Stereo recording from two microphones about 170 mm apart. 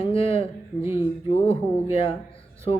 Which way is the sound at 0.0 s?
35° left (ahead or behind).